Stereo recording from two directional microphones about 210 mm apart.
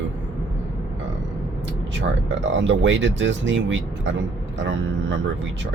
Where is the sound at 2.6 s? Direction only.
60° right (ahead or behind).